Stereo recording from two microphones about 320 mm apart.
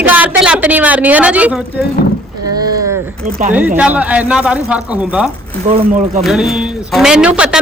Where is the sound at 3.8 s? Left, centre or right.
Centre.